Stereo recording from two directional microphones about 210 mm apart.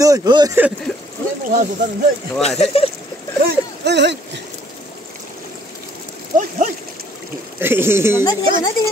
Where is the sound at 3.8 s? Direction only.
55° right (ahead or behind).